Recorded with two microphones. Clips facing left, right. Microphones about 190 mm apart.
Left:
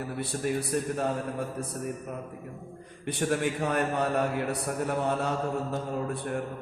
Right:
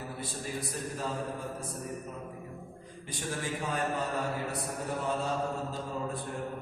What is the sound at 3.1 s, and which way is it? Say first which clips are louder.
A man's voice: left 8 dB; 65° left (ahead or behind).